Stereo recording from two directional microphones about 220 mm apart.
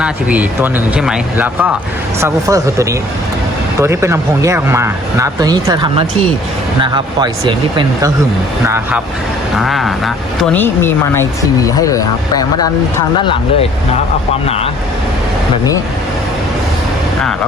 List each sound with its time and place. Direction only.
0.0 s speech: 5° right (ahead or behind)
9.6 s speech: centre (ahead or behind); by 14.7 s 25° left (ahead or behind)